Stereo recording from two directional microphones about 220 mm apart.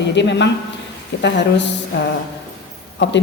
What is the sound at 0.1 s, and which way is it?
A woman's voice, 55° left (ahead or behind).